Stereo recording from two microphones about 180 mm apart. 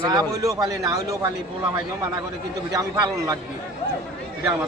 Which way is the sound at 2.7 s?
20° right (ahead or behind).